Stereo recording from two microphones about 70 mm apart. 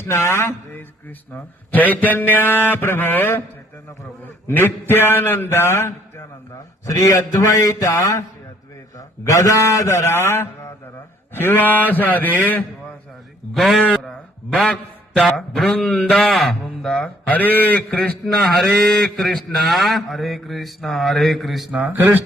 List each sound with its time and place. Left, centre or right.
0.0 s a man's voice: left
4.5 s a sound: left
6.8 s a man's voice: left
13.5 s a man's voice: centre
17.2 s a man's voice: left
17.9 s a man's voice: centre
21.8 s a man's voice: right